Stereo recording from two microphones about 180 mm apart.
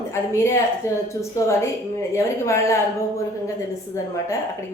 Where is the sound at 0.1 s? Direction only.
15° left (ahead or behind).